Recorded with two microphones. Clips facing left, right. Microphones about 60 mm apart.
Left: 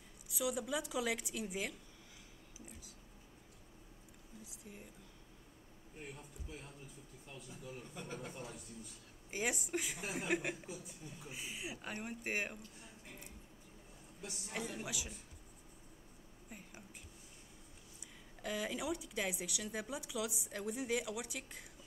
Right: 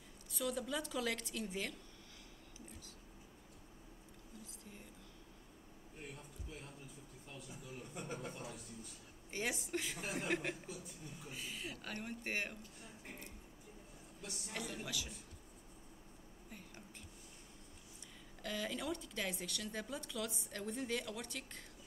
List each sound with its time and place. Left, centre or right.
0.3 s speech: centre
5.9 s speech: centre
7.9 s speech: centre
9.3 s speech: centre
11.3 s speech: centre
14.6 s speech: centre
16.4 s a sound: centre
18.4 s speech: centre